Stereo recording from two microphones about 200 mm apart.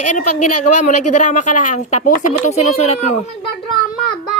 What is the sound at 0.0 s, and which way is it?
A woman's voice, 40° left (ahead or behind).